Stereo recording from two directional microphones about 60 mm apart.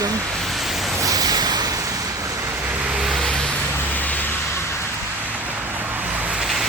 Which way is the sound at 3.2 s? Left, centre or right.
Centre.